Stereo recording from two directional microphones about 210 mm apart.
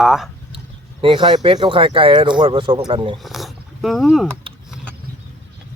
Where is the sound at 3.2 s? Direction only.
Centre (ahead or behind).